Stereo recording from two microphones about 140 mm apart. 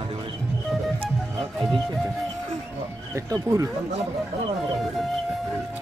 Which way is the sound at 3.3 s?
25° right (ahead or behind).